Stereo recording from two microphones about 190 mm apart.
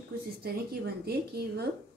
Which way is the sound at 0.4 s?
55° right (ahead or behind).